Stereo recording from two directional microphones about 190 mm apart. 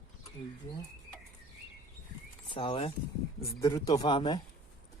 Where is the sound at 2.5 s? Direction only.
25° left (ahead or behind).